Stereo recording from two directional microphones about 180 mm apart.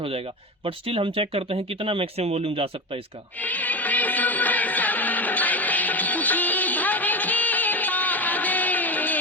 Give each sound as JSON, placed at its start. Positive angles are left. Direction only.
{"t": 0.6, "sound": "speech", "side_deg": -30}
{"t": 3.4, "sound": "music", "side_deg": 10}